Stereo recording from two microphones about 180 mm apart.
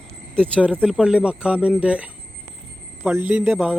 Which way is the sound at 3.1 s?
10° right (ahead or behind).